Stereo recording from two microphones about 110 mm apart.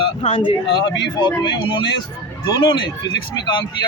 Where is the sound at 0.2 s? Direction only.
50° left (ahead or behind).